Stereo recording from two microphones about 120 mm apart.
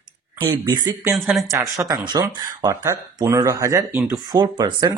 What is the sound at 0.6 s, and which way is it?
Speech, 35° right (ahead or behind).